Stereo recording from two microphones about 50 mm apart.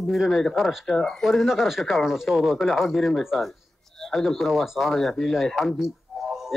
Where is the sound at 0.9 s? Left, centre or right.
Centre.